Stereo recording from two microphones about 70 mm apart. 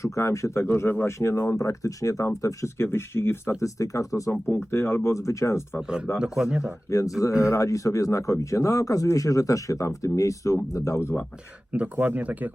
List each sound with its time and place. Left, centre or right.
0.0 s speech: left
2.8 s speech: left
6.1 s a man's voice: centre
6.9 s speech: left
11.7 s speech: right